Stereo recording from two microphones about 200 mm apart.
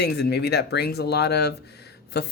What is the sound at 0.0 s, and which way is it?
Speech, 55° left (ahead or behind).